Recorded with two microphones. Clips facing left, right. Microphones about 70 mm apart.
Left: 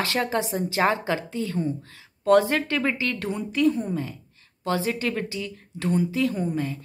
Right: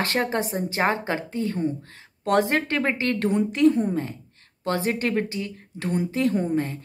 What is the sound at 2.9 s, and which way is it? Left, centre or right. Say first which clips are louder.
A woman's voice: right 5 dB; right.